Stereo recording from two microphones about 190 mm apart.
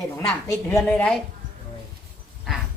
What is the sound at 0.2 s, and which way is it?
Speech, 20° left (ahead or behind).